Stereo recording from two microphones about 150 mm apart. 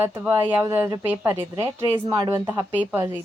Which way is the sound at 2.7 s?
10° right (ahead or behind).